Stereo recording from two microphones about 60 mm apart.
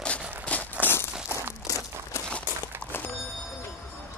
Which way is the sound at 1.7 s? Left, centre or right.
Left.